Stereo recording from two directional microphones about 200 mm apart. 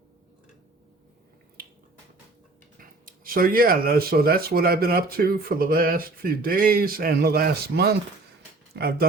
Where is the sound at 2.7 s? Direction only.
45° right (ahead or behind).